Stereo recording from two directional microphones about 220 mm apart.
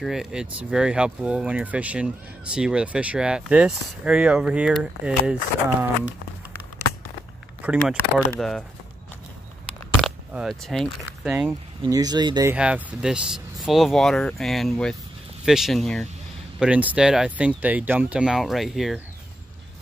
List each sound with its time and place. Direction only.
0.0 s speech: centre (ahead or behind)
7.6 s speech: 5° right (ahead or behind)
9.9 s speech: centre (ahead or behind)
11.8 s speech: 15° right (ahead or behind)
12.5 s speech: 5° right (ahead or behind)